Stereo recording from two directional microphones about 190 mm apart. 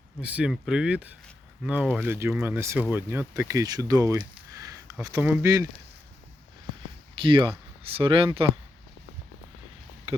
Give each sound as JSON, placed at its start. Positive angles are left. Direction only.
{"t": 0.2, "sound": "speech", "side_deg": -5}
{"t": 7.2, "sound": "speech", "side_deg": -25}